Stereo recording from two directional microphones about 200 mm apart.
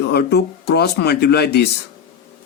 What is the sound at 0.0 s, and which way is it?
Speech, 55° left (ahead or behind).